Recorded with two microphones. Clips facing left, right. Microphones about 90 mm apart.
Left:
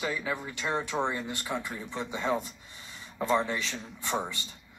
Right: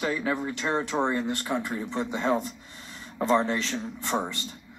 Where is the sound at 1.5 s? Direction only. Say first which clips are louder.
Right 3 dB; 15° right (ahead or behind).